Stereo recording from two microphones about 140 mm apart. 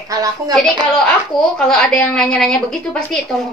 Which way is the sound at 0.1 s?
25° right (ahead or behind).